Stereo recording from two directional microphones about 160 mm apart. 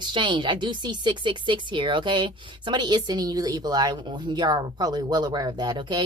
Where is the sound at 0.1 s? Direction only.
30° right (ahead or behind).